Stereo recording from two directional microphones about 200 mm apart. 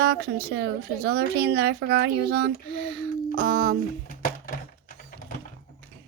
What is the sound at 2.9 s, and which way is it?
Speech, 45° right (ahead or behind).